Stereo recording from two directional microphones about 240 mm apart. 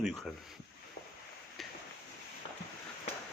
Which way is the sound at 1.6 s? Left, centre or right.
Centre.